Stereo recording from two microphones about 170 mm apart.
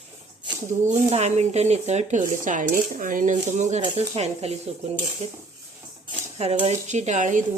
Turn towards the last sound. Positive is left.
turn(degrees=-45)  # may be behind; listen again after turning